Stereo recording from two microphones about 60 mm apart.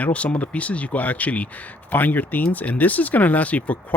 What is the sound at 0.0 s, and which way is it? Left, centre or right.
Speech, left.